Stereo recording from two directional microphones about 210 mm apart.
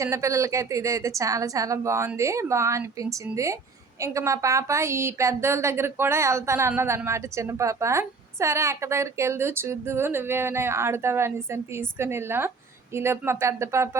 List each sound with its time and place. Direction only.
0.0 s a woman's voice: 15° right (ahead or behind)